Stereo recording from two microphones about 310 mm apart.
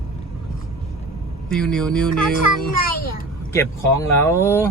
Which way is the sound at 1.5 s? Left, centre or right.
Centre.